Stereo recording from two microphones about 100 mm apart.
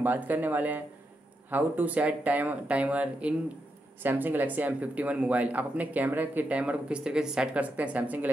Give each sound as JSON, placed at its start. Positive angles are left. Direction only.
{"t": 0.0, "sound": "speech", "side_deg": -15}